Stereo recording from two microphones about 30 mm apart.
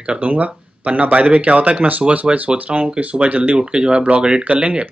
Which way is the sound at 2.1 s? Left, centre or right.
Right.